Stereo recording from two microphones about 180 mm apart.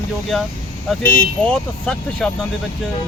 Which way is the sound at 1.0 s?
5° left (ahead or behind).